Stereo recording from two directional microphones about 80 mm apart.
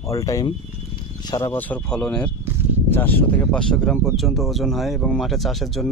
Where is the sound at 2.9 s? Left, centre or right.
Left.